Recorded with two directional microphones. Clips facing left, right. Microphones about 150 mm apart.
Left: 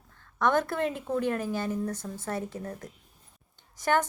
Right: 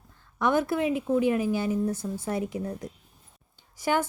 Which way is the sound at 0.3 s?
10° right (ahead or behind).